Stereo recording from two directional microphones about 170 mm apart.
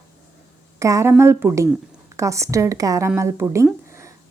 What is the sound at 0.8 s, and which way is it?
A woman's voice, 15° right (ahead or behind).